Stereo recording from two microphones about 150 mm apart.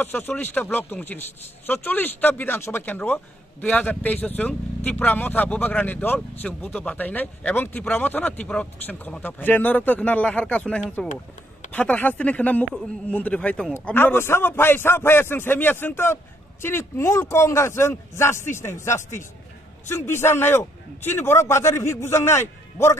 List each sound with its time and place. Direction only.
0.0 s speech: 10° left (ahead or behind)